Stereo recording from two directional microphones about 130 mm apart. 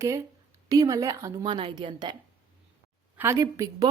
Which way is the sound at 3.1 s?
20° right (ahead or behind).